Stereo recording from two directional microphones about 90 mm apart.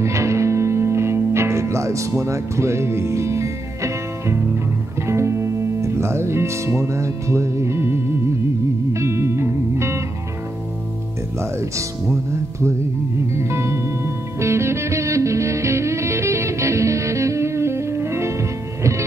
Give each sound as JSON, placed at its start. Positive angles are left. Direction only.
{"t": 0.0, "sound": "music", "side_deg": -35}
{"t": 5.0, "sound": "speech", "side_deg": -30}
{"t": 8.9, "sound": "music", "side_deg": -30}
{"t": 11.7, "sound": "speech", "side_deg": -30}
{"t": 13.3, "sound": "music", "side_deg": -30}